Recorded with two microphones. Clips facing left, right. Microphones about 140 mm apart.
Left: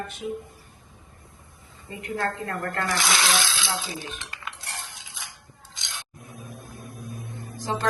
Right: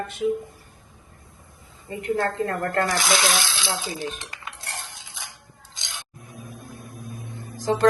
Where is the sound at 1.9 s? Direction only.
35° right (ahead or behind).